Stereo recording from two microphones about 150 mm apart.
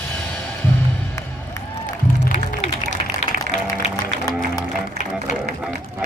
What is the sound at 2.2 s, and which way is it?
Music, 50° left (ahead or behind).